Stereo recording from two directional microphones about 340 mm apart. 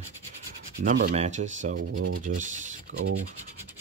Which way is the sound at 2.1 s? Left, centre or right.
Right.